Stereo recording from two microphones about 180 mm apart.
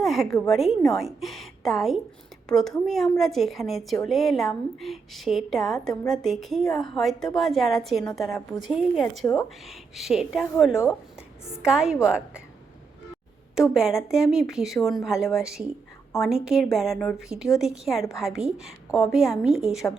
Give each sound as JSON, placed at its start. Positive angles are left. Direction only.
{"t": 0.0, "sound": "a woman's voice", "side_deg": 0}
{"t": 1.2, "sound": "a sound", "side_deg": 0}
{"t": 2.5, "sound": "a woman's voice", "side_deg": 0}
{"t": 9.2, "sound": "a woman's voice", "side_deg": 15}
{"t": 9.6, "sound": "a woman's voice", "side_deg": 0}
{"t": 13.6, "sound": "a woman's voice", "side_deg": 0}